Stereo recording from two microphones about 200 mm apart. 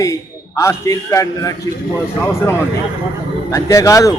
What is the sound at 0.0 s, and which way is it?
A man's voice, 15° left (ahead or behind).